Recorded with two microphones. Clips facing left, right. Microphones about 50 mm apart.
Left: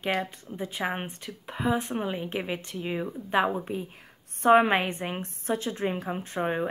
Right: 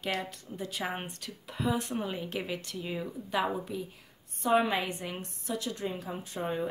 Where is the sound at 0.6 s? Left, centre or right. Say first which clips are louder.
Left 4 dB; left.